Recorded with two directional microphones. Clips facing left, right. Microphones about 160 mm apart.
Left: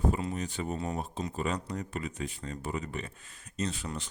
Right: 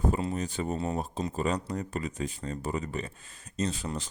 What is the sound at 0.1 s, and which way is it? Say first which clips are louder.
Speech: right 2 dB; 35° right (ahead or behind).